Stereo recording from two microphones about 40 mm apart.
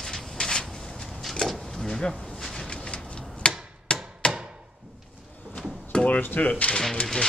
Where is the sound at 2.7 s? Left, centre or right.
Left.